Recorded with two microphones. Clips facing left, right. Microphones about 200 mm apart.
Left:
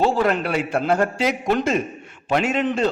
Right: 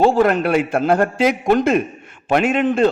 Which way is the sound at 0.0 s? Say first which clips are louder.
Right 5 dB; 50° right (ahead or behind).